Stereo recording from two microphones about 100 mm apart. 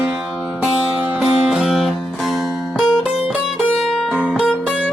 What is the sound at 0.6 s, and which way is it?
Music, 15° right (ahead or behind).